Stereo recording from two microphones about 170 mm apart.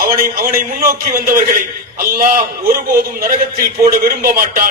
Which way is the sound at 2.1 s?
55° right (ahead or behind).